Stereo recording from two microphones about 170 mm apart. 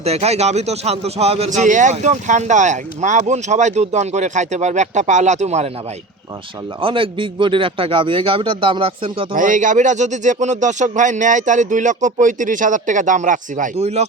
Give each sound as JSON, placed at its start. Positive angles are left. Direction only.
{"t": 0.0, "sound": "speech", "side_deg": -40}
{"t": 6.8, "sound": "a man's voice", "side_deg": -30}
{"t": 9.3, "sound": "speech", "side_deg": -50}